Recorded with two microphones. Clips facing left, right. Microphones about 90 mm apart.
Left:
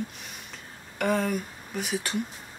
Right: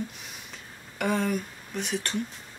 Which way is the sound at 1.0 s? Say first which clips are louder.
Left 1 dB; centre (ahead or behind).